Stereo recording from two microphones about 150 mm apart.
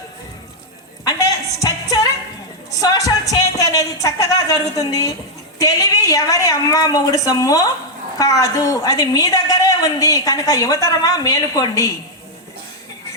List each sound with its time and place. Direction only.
1.0 s music: 25° left (ahead or behind)
5.5 s a woman's voice: 20° left (ahead or behind)